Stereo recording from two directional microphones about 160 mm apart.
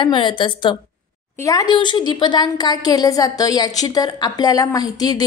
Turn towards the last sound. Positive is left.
turn(degrees=25)  # may be behind; listen again after turning